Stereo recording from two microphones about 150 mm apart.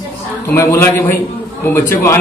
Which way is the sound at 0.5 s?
15° left (ahead or behind).